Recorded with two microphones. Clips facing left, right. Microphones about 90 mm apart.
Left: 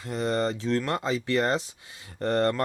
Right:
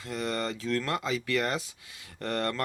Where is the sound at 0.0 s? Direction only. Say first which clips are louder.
Left 5 dB; 25° left (ahead or behind).